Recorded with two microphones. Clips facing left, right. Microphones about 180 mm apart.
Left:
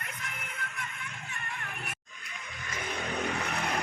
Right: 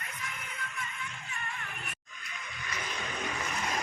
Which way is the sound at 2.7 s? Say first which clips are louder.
Left 3 dB; 55° left (ahead or behind).